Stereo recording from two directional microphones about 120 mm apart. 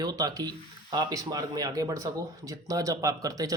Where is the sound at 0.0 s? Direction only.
35° right (ahead or behind).